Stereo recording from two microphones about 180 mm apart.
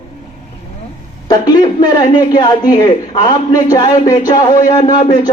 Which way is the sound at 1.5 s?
25° left (ahead or behind).